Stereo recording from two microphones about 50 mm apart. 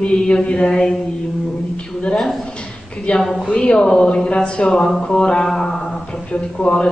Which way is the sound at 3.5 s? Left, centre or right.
Left.